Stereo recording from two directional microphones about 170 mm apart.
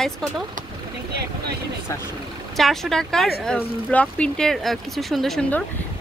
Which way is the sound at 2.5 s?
Centre (ahead or behind).